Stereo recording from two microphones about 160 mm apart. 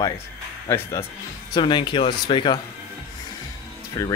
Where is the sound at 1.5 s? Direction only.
30° left (ahead or behind).